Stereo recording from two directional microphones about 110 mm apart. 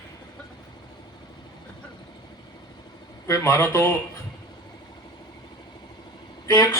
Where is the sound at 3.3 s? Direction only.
30° left (ahead or behind).